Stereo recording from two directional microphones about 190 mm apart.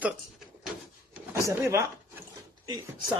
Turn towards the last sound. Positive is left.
turn(degrees=-20)  # may be behind; listen again after turning